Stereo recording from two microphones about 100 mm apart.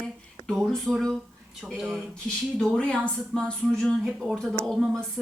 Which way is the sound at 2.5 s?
10° left (ahead or behind).